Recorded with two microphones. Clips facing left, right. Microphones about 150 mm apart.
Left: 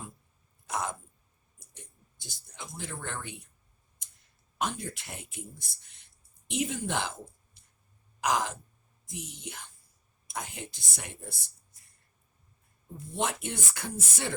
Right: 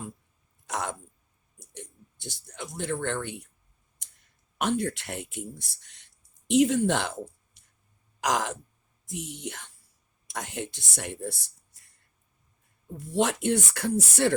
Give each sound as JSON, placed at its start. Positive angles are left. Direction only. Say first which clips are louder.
{"t": 0.7, "sound": "a sound", "louder": "right 1 dB", "side_deg": -70}
{"t": 1.7, "sound": "speech", "louder": "right 10 dB", "side_deg": -70}
{"t": 4.5, "sound": "speech", "louder": "right 7 dB", "side_deg": -70}
{"t": 8.2, "sound": "speech", "louder": "right 2 dB", "side_deg": -75}
{"t": 13.0, "sound": "speech", "louder": "right 7 dB", "side_deg": -70}